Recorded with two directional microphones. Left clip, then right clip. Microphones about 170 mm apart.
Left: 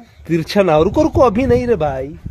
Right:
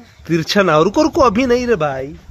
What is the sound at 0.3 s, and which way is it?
Speech, 5° left (ahead or behind).